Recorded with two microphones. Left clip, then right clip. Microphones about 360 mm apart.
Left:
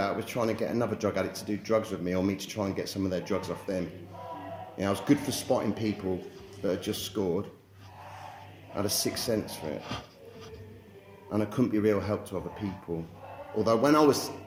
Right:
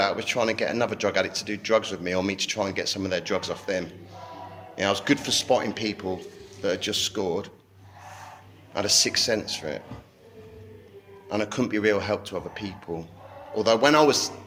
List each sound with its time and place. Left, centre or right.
0.0 s speech: right
8.7 s speech: right
11.3 s speech: right